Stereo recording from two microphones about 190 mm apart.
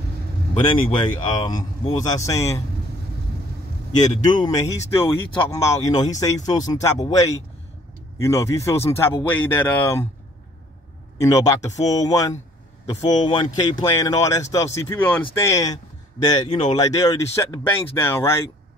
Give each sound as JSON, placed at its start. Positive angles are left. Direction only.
{"t": 0.6, "sound": "speech", "side_deg": 25}
{"t": 3.9, "sound": "speech", "side_deg": 20}
{"t": 11.1, "sound": "speech", "side_deg": 20}